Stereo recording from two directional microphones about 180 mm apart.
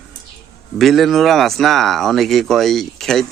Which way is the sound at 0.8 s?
Centre (ahead or behind).